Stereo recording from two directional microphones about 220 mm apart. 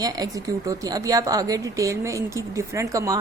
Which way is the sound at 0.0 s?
15° right (ahead or behind).